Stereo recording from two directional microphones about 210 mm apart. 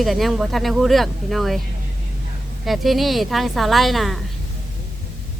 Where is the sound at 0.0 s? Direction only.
Centre (ahead or behind).